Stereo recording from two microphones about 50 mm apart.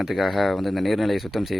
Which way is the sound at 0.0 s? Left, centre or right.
Centre.